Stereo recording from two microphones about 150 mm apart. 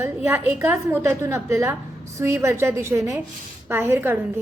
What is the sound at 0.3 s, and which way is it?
A woman's voice, 15° right (ahead or behind).